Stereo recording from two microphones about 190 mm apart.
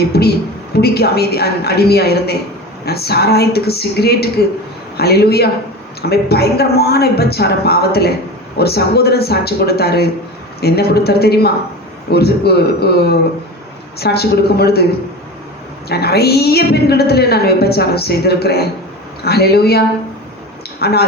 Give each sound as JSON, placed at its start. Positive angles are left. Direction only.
{"t": 0.1, "sound": "a sound", "side_deg": 55}
{"t": 0.8, "sound": "a woman's voice", "side_deg": 55}
{"t": 15.9, "sound": "a woman's voice", "side_deg": 55}
{"t": 20.8, "sound": "a woman's voice", "side_deg": 55}